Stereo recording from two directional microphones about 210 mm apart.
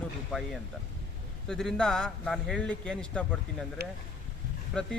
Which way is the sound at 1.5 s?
Centre (ahead or behind).